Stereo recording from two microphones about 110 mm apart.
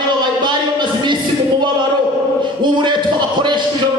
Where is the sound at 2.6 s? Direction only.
45° right (ahead or behind).